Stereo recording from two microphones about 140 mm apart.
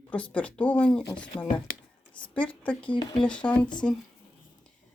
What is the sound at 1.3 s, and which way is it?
Speech, 30° left (ahead or behind).